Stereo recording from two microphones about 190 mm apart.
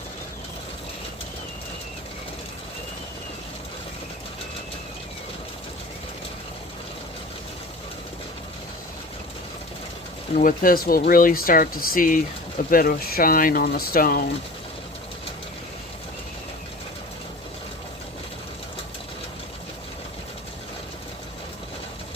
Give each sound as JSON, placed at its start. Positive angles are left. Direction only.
{"t": 10.3, "sound": "speech", "side_deg": 45}